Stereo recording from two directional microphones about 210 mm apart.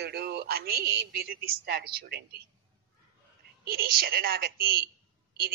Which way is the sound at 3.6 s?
45° right (ahead or behind).